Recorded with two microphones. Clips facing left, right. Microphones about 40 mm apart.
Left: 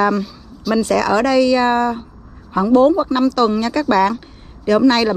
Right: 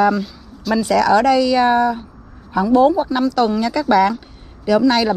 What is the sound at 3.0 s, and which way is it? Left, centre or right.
Speech, left.